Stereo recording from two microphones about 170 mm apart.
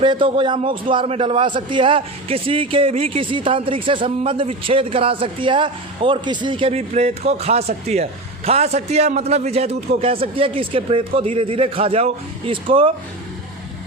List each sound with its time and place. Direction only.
0.0 s a man's voice: 30° right (ahead or behind)